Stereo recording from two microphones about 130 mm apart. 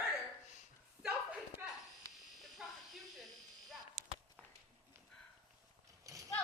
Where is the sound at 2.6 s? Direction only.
5° right (ahead or behind).